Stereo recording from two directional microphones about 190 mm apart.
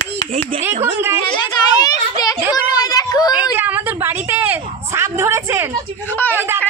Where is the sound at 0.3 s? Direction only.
40° right (ahead or behind).